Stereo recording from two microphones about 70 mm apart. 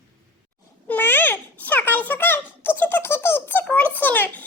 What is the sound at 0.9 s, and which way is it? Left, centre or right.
Babbling, left.